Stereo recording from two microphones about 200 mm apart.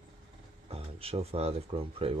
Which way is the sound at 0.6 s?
30° right (ahead or behind).